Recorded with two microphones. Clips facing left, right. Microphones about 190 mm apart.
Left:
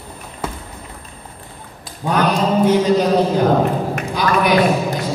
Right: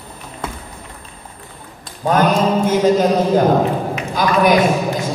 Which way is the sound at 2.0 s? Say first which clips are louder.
Right 2 dB; 45° right (ahead or behind).